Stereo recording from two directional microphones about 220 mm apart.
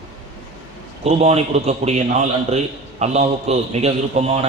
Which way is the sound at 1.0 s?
30° right (ahead or behind).